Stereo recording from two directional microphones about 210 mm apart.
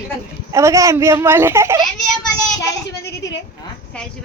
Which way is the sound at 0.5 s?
15° right (ahead or behind).